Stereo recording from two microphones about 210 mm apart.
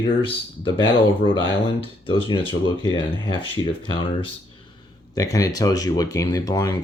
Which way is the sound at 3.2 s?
25° left (ahead or behind).